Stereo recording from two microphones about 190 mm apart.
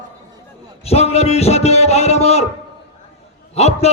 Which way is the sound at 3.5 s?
35° left (ahead or behind).